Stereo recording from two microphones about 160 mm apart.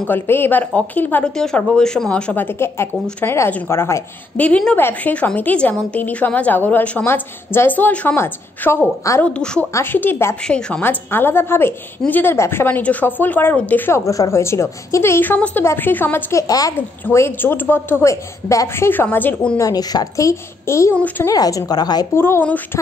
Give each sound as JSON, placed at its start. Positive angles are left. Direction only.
{"t": 0.0, "sound": "speech", "side_deg": 15}
{"t": 9.3, "sound": "a woman's voice", "side_deg": 5}
{"t": 19.6, "sound": "a child's voice", "side_deg": 25}
{"t": 21.3, "sound": "a child's voice", "side_deg": 20}
{"t": 22.2, "sound": "speech", "side_deg": 10}